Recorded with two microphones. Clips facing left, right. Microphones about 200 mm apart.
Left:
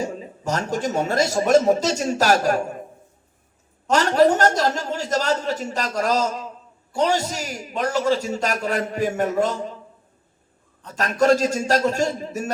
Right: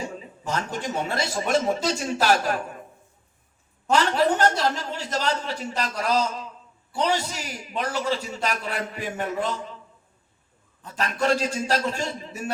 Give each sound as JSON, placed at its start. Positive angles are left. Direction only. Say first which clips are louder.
{"t": 0.0, "sound": "speech", "louder": "left 6 dB", "side_deg": 45}
{"t": 3.9, "sound": "a man's voice", "louder": "left 4 dB", "side_deg": 45}
{"t": 10.9, "sound": "a man's voice", "louder": "left 6 dB", "side_deg": 45}